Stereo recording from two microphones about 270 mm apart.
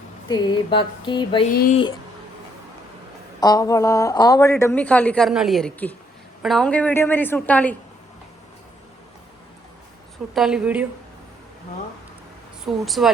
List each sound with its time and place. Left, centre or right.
0.3 s a woman's voice: centre
1.5 s speech: left
3.4 s a woman's voice: centre
10.3 s a woman's voice: centre
12.8 s a woman's voice: centre